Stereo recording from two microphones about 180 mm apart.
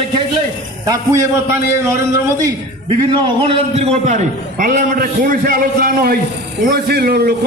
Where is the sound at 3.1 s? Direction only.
30° right (ahead or behind).